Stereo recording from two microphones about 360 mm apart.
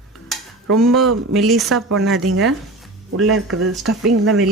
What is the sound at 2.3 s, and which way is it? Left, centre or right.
Speech, right.